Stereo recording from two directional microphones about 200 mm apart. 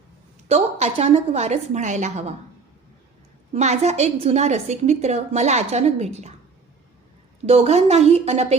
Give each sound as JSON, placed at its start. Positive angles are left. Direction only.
{"t": 0.4, "sound": "a woman's voice", "side_deg": -30}
{"t": 3.5, "sound": "a woman's voice", "side_deg": -35}
{"t": 7.4, "sound": "a woman's voice", "side_deg": -30}